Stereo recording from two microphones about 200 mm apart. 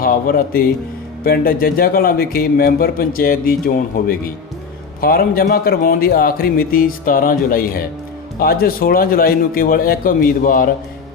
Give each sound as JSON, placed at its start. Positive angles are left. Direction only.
{"t": 0.0, "sound": "a man's voice", "side_deg": 45}